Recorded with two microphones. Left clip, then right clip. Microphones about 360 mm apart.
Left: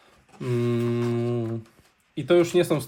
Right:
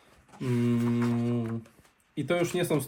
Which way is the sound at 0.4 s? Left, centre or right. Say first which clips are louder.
Left 4 dB; left.